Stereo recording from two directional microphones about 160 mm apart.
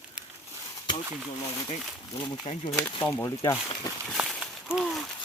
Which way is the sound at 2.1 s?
25° left (ahead or behind).